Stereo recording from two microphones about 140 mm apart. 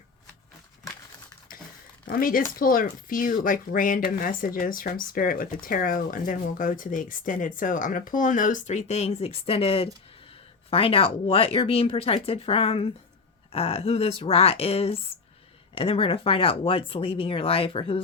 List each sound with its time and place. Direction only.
2.0 s speech: 90° left; by 18.0 s 40° left (ahead or behind)